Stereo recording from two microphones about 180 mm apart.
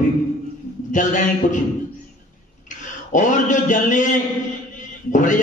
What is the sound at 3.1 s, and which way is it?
A man's voice, 45° left (ahead or behind).